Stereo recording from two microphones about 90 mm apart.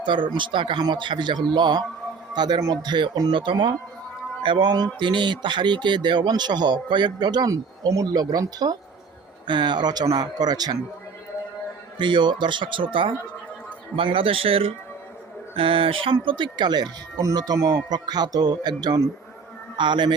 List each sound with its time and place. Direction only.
0.0 s speech: 65° right (ahead or behind)
3.3 s speech: 65° right (ahead or behind); by 8.8 s 45° right (ahead or behind)
9.5 s speech: 55° right (ahead or behind)
11.9 s a man's voice: 60° right (ahead or behind); by 16.1 s 80° right
16.2 s speech: 60° right (ahead or behind)